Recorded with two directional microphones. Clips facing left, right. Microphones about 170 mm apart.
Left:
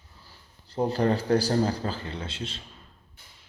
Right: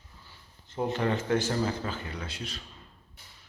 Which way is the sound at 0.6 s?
35° left (ahead or behind).